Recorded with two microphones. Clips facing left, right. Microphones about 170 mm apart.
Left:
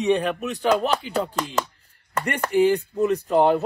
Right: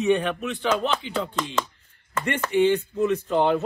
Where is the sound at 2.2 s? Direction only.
35° left (ahead or behind).